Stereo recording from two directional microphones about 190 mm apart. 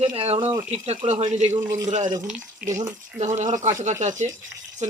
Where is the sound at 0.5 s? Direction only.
10° right (ahead or behind).